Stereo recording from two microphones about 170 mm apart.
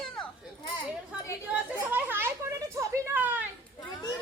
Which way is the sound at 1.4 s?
10° right (ahead or behind).